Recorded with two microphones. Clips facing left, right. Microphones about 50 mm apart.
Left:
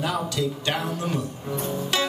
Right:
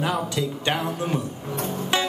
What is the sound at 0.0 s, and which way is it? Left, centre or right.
A man's voice, centre.